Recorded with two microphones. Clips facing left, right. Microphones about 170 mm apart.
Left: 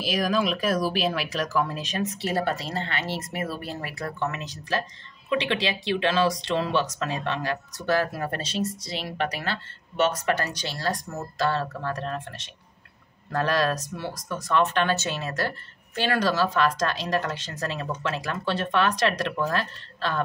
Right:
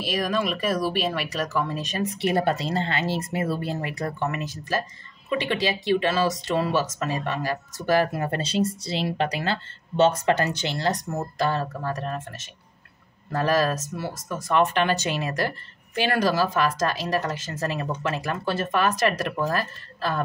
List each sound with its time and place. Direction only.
0.0 s speech: centre (ahead or behind)
2.1 s speech: 20° right (ahead or behind)